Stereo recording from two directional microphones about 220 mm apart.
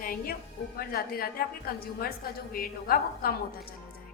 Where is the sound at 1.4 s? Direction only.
45° left (ahead or behind).